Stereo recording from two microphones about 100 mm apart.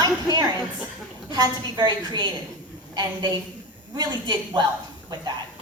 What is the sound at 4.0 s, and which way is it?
Speech, 45° right (ahead or behind).